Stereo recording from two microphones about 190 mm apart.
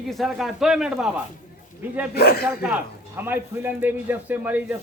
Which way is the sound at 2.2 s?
55° left (ahead or behind).